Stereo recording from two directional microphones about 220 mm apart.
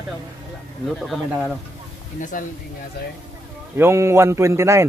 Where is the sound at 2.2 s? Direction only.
40° left (ahead or behind).